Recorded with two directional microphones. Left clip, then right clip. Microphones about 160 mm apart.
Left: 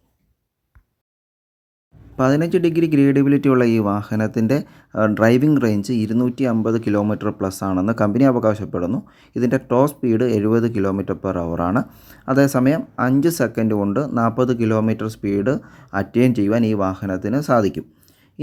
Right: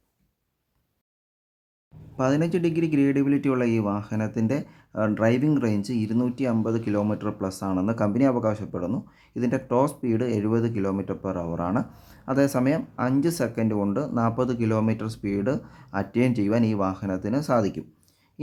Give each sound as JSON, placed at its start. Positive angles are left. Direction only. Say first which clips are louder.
{"t": 2.1, "sound": "speech", "louder": "left 6 dB", "side_deg": 30}
{"t": 11.9, "sound": "speech", "louder": "left 5 dB", "side_deg": 20}
{"t": 12.2, "sound": "speech", "louder": "left 6 dB", "side_deg": 30}